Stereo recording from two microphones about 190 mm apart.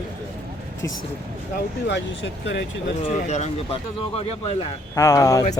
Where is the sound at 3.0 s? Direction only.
35° left (ahead or behind).